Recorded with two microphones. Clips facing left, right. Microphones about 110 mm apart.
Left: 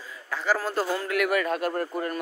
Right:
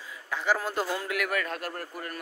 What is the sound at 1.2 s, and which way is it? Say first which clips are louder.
Speech: left 6 dB; 10° left (ahead or behind).